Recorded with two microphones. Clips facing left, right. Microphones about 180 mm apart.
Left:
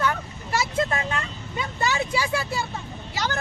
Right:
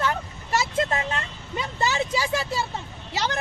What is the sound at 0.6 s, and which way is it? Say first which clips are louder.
Speech: even; 25° right (ahead or behind).